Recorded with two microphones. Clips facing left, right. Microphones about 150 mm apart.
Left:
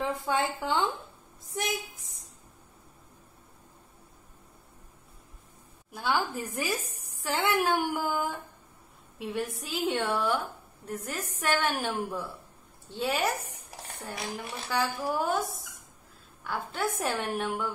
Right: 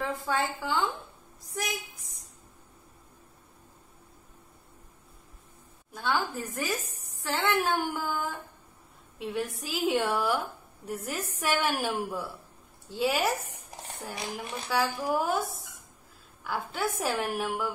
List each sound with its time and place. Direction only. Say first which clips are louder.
0.2 s a woman's voice: left 1 dB; 20° left (ahead or behind)
5.9 s speech: left 1 dB; 10° left (ahead or behind)
9.2 s a woman's voice: right 1 dB; centre (ahead or behind)
16.4 s a woman's voice: even; 5° right (ahead or behind)